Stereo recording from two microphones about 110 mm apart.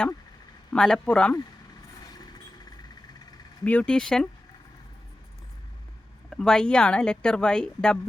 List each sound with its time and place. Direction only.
0.7 s a woman's voice: 5° left (ahead or behind)
2.0 s a sound: 35° left (ahead or behind)
3.6 s a woman's voice: 10° left (ahead or behind)
6.3 s a woman's voice: 5° left (ahead or behind)